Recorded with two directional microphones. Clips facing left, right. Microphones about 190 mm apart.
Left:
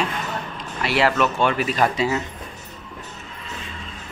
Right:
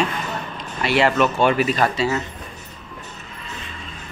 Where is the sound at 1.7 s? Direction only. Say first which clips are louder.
Right 1 dB; 10° left (ahead or behind).